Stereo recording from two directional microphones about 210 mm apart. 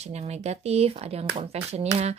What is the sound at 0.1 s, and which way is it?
Speech, 30° right (ahead or behind).